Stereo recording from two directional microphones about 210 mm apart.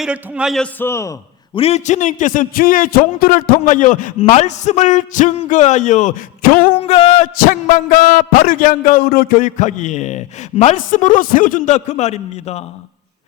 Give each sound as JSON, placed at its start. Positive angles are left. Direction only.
{"t": 0.0, "sound": "a man's voice", "side_deg": -5}
{"t": 1.5, "sound": "a man's voice", "side_deg": 30}